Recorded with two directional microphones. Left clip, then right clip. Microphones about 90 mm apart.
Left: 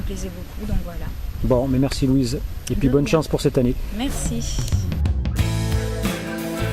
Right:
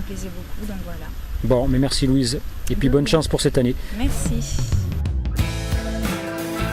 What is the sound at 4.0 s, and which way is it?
Music, centre (ahead or behind).